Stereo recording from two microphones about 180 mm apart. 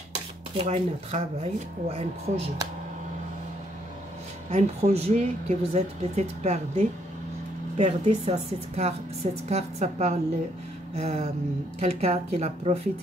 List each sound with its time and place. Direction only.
0.7 s speech: 35° right (ahead or behind)
4.5 s speech: 40° right (ahead or behind)